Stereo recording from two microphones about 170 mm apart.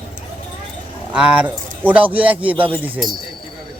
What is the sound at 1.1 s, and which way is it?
Speech, 5° right (ahead or behind).